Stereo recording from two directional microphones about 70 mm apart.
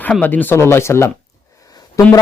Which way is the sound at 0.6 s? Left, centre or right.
Left.